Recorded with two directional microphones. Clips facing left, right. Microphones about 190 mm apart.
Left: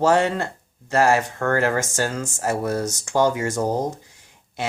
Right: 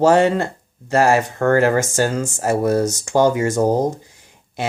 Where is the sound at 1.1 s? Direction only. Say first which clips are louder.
Right 4 dB; 25° right (ahead or behind).